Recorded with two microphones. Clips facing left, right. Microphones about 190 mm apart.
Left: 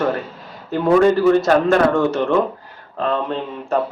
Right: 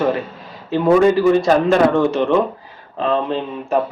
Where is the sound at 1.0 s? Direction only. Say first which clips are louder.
Even; 15° right (ahead or behind).